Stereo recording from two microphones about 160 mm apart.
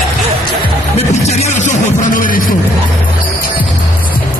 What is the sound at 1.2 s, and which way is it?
Music, 45° left (ahead or behind).